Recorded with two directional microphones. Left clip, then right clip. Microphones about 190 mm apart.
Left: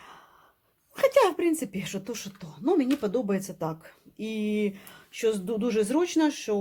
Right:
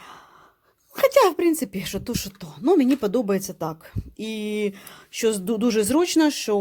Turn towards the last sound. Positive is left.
turn(degrees=-45)  # may be behind; listen again after turning